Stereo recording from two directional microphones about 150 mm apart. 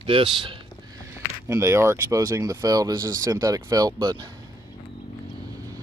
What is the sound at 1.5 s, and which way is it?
Speech, 20° right (ahead or behind).